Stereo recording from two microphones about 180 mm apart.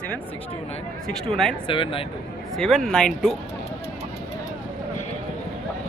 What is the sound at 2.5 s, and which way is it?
Speech, centre (ahead or behind).